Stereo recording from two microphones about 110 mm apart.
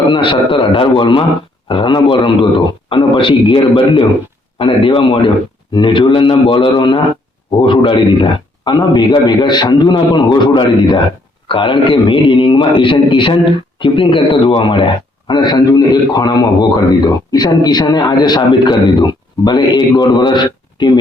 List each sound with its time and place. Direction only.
0.1 s a man's voice: 50° left (ahead or behind)